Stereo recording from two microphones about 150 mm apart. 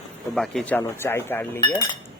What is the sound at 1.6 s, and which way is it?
Speech, 25° left (ahead or behind).